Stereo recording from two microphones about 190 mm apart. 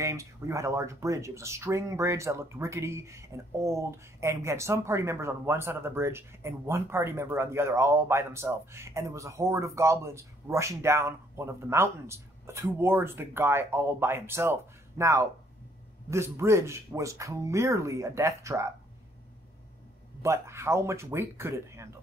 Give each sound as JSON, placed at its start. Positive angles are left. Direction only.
{"t": 0.0, "sound": "speech", "side_deg": -15}
{"t": 20.2, "sound": "speech", "side_deg": -15}